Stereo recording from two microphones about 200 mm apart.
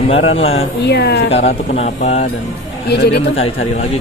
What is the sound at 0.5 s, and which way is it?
Speech, 55° left (ahead or behind).